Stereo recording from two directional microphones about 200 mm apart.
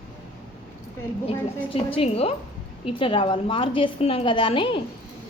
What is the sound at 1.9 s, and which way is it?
A woman's voice, 30° left (ahead or behind).